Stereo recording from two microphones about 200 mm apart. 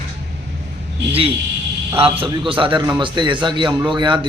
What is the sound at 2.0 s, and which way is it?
A man's voice, 25° right (ahead or behind).